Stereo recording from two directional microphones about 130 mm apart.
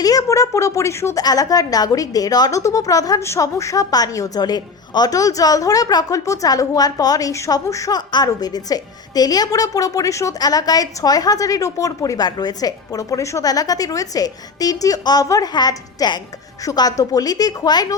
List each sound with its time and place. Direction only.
0.0 s a woman's voice: 25° left (ahead or behind)